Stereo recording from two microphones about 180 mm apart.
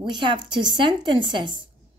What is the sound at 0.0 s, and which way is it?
Speech, 25° right (ahead or behind).